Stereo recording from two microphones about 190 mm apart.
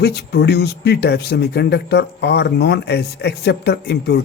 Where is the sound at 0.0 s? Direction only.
60° left (ahead or behind).